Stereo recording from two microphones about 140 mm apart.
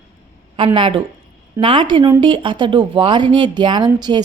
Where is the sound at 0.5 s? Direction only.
40° right (ahead or behind).